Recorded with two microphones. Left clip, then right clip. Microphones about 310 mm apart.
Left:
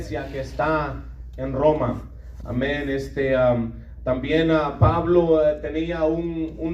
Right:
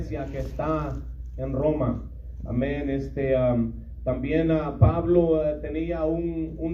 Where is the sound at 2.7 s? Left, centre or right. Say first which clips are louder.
Left 4 dB; left.